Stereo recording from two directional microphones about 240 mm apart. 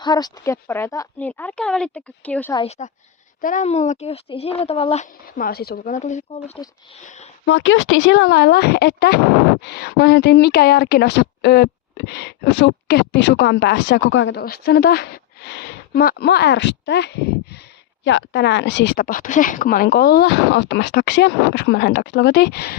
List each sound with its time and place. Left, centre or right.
0.0 s speech: centre
2.6 s a child's voice: left
5.2 s speech: left
7.4 s speech: left
14.4 s speech: left